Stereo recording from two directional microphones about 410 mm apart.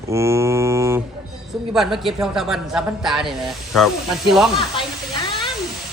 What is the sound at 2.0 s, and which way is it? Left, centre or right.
A man's voice, centre.